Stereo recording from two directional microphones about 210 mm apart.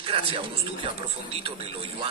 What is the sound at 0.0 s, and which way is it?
A man's voice, 25° right (ahead or behind).